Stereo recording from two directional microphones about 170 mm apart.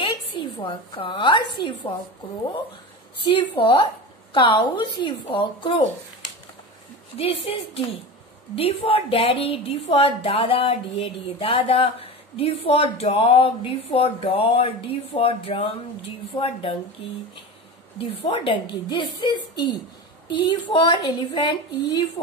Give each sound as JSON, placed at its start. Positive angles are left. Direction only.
{"t": 0.0, "sound": "a sound", "side_deg": 30}
{"t": 1.6, "sound": "a woman's voice", "side_deg": 30}
{"t": 3.3, "sound": "a woman's voice", "side_deg": 30}
{"t": 7.4, "sound": "a woman's voice", "side_deg": 35}
{"t": 17.9, "sound": "a woman's voice", "side_deg": 30}